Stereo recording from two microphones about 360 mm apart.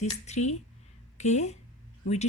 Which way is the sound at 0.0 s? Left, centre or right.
Centre.